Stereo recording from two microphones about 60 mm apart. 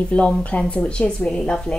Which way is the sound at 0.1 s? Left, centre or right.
Left.